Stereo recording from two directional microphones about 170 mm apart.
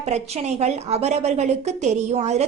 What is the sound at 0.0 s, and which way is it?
A woman's voice, 40° right (ahead or behind).